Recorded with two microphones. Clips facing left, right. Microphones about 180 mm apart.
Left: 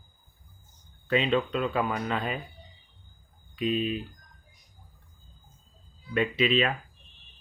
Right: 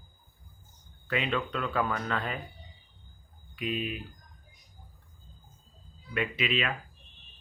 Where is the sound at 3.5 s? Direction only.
25° left (ahead or behind).